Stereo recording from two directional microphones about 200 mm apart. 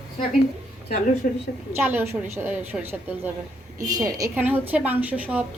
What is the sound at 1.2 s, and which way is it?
Speech, 45° left (ahead or behind).